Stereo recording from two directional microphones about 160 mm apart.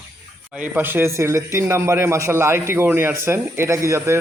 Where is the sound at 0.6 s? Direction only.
10° right (ahead or behind).